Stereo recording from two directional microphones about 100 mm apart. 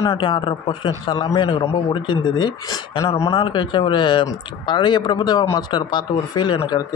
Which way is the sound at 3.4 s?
50° left (ahead or behind).